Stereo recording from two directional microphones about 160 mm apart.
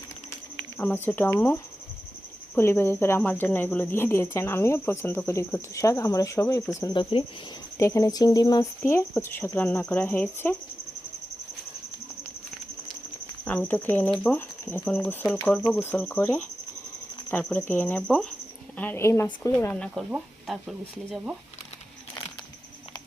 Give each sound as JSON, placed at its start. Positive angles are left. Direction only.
{"t": 0.5, "sound": "a woman's voice", "side_deg": 10}
{"t": 7.8, "sound": "a woman's voice", "side_deg": 20}
{"t": 13.4, "sound": "a woman's voice", "side_deg": 10}